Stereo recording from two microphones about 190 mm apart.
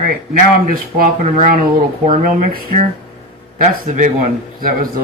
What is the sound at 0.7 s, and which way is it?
Speech, 50° right (ahead or behind).